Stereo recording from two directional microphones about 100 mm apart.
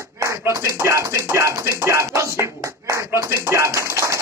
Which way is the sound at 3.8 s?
30° right (ahead or behind).